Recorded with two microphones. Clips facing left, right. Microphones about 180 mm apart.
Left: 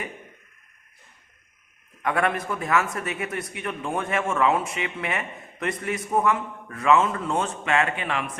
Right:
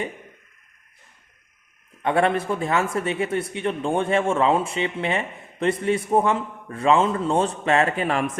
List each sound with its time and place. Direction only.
2.0 s speech: 30° right (ahead or behind)